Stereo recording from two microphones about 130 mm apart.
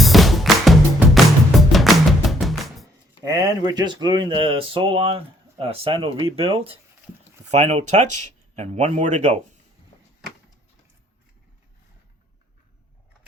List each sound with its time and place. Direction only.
0.0 s music: centre (ahead or behind)
3.2 s speech: 30° right (ahead or behind); by 6.7 s 45° right (ahead or behind)
7.5 s speech: 60° right (ahead or behind)